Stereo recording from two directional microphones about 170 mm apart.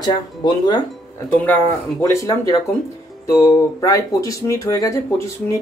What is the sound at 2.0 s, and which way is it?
Speech, 15° left (ahead or behind).